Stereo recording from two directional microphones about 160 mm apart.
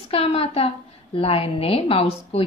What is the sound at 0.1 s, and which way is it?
A woman's voice, 40° left (ahead or behind).